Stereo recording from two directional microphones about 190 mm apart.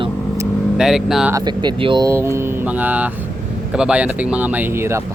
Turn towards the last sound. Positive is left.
turn(degrees=-15)  # may be behind; listen again after turning